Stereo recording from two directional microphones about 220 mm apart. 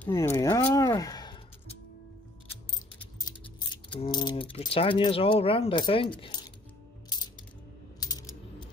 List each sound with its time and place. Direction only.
0.0 s speech: 10° left (ahead or behind)
3.2 s a sound: 20° left (ahead or behind)
4.0 s speech: 20° left (ahead or behind)
7.1 s music: 20° left (ahead or behind)
8.0 s coin: 15° left (ahead or behind)